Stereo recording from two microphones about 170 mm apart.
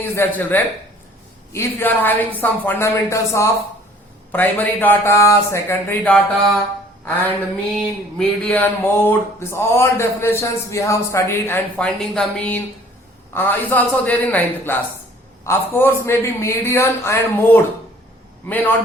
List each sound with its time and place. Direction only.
0.0 s speech: 10° left (ahead or behind)
7.0 s music: 10° left (ahead or behind)
8.2 s speech: 5° left (ahead or behind)